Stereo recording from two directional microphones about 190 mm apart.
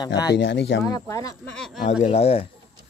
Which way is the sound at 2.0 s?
35° left (ahead or behind).